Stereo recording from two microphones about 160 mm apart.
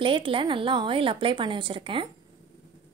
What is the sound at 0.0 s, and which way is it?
Speech, 35° right (ahead or behind).